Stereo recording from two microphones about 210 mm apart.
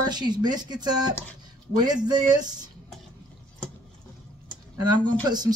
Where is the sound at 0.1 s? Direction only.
20° right (ahead or behind).